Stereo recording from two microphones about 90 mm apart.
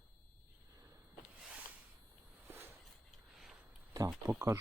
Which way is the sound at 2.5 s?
25° right (ahead or behind).